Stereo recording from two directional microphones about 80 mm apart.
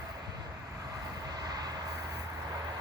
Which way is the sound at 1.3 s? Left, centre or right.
Right.